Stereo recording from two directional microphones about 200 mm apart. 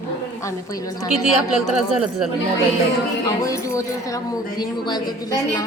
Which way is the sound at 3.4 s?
15° left (ahead or behind).